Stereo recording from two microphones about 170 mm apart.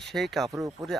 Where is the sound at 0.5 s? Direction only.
20° right (ahead or behind).